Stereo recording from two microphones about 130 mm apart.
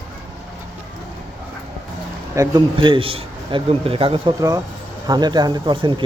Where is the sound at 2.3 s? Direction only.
25° right (ahead or behind).